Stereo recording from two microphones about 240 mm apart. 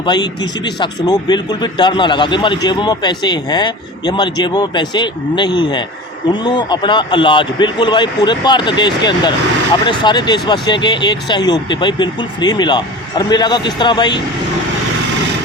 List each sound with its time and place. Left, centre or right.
0.0 s speech: centre